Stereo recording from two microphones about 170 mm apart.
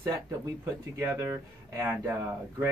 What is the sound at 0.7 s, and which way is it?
Speech, 15° right (ahead or behind).